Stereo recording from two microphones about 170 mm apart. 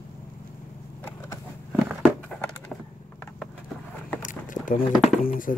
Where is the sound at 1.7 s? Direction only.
10° right (ahead or behind).